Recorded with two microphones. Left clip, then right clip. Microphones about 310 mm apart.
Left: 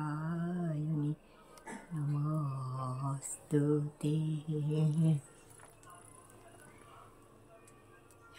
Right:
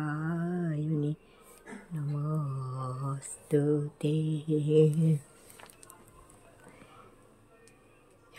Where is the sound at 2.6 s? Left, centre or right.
Centre.